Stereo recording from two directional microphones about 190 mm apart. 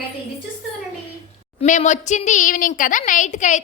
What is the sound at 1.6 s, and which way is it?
A woman's voice, 40° left (ahead or behind).